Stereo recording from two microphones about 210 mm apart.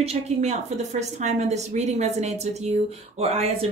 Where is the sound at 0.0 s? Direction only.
30° right (ahead or behind).